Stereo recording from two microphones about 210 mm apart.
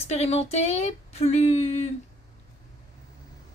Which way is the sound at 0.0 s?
30° left (ahead or behind).